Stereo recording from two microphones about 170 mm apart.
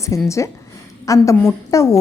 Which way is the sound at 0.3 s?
15° left (ahead or behind).